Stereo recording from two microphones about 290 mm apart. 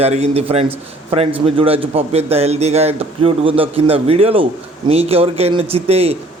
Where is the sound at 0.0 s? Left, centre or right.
Right.